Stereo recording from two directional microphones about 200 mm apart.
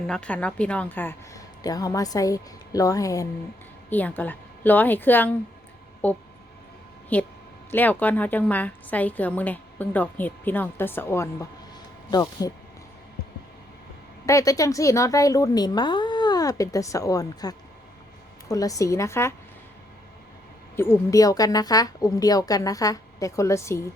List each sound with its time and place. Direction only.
0.1 s a woman's voice: 5° left (ahead or behind)
14.3 s a woman's voice: 15° left (ahead or behind)
20.7 s a woman's voice: 15° left (ahead or behind)